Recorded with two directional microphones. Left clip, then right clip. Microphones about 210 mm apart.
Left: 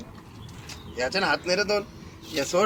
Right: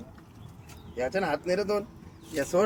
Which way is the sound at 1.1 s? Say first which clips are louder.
Left 4 dB; 55° right (ahead or behind).